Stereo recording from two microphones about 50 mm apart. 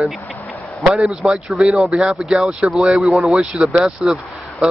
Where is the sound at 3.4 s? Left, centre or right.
Right.